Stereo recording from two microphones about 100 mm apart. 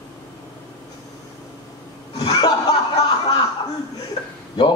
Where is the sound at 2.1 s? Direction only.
45° left (ahead or behind).